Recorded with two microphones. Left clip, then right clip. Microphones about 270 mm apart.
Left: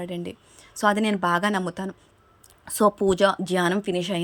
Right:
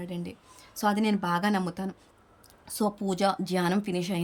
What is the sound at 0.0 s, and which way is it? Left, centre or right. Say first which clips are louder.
A woman's voice: left 6 dB; centre.